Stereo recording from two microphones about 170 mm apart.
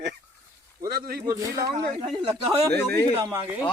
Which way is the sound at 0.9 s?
65° right (ahead or behind).